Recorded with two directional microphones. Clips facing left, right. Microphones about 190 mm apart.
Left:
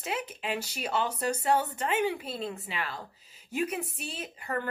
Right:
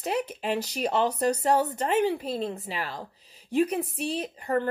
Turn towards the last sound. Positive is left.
turn(degrees=-35)  # may be behind; listen again after turning